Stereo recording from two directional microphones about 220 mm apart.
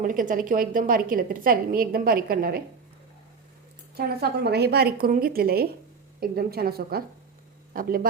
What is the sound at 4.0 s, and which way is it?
A woman's voice, 45° right (ahead or behind).